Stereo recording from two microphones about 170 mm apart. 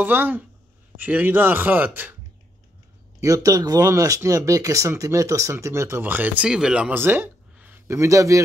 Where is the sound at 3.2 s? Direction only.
20° right (ahead or behind).